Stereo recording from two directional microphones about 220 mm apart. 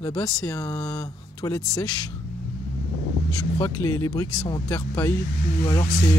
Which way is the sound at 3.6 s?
15° left (ahead or behind).